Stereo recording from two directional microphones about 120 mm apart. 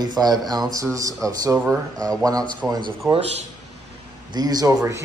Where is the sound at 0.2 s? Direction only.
30° right (ahead or behind).